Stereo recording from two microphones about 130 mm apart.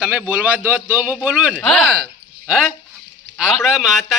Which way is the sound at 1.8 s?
5° right (ahead or behind).